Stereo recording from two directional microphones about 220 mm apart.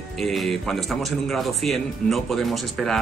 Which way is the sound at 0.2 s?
Centre (ahead or behind).